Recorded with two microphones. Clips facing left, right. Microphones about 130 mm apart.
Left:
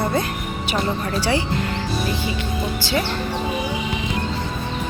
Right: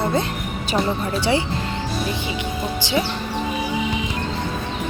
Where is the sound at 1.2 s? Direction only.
25° right (ahead or behind).